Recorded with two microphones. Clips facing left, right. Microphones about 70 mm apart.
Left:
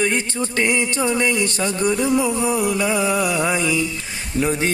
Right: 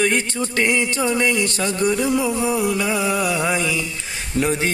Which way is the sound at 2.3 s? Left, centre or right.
Centre.